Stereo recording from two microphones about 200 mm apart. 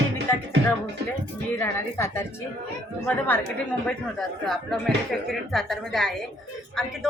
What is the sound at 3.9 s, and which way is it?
Speech, centre (ahead or behind).